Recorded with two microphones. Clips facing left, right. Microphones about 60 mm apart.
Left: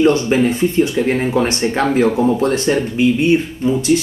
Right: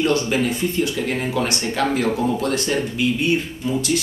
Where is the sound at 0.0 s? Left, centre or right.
Left.